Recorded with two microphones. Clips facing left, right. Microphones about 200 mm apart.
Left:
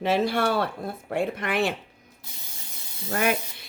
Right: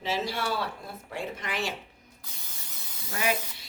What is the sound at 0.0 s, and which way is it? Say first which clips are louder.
A woman's voice: left 8 dB; 55° left (ahead or behind).